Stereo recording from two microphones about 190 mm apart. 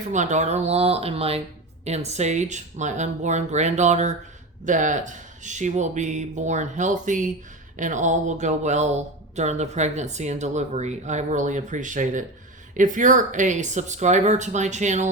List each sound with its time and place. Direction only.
0.1 s speech: 40° right (ahead or behind)